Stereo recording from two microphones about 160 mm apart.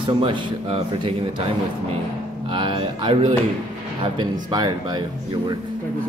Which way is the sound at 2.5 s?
30° right (ahead or behind).